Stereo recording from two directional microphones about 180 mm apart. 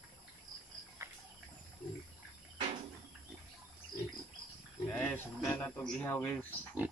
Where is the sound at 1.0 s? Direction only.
15° right (ahead or behind).